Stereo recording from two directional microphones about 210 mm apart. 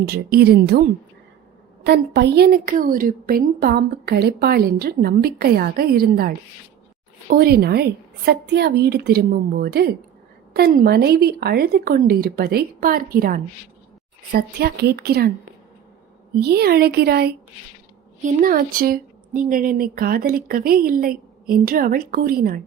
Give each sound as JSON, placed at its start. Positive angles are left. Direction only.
{"t": 0.0, "sound": "a woman's voice", "side_deg": -50}
{"t": 16.4, "sound": "a woman's voice", "side_deg": -50}